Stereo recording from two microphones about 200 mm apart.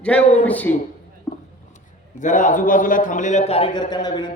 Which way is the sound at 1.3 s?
20° left (ahead or behind).